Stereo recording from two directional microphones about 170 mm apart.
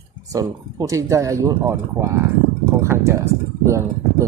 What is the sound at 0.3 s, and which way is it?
Speech, 20° right (ahead or behind).